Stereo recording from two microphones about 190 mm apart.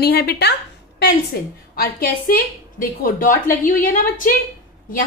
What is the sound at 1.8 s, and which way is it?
A woman's voice, 50° left (ahead or behind).